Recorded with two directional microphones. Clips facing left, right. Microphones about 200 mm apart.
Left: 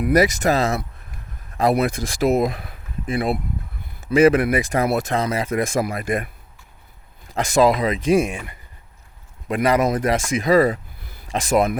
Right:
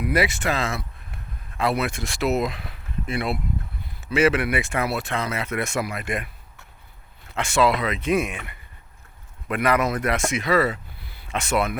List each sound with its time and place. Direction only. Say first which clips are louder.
0.0 s speech: left 6 dB; 45° left (ahead or behind)
4.1 s speech: left 5 dB; 40° left (ahead or behind)
5.8 s speech: left 5 dB; 45° left (ahead or behind)
7.3 s speech: left 4 dB; 40° left (ahead or behind)
11.3 s speech: left 5 dB; 35° left (ahead or behind)